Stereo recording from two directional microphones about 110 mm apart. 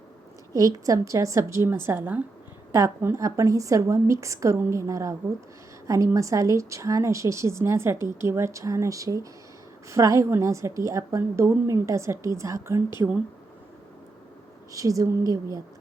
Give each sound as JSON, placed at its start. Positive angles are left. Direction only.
{"t": 0.5, "sound": "a woman's voice", "side_deg": -30}
{"t": 14.7, "sound": "speech", "side_deg": -30}